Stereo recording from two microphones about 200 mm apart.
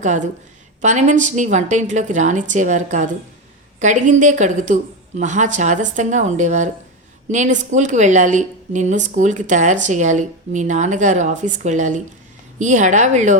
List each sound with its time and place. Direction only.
0.0 s a woman's voice: 35° right (ahead or behind)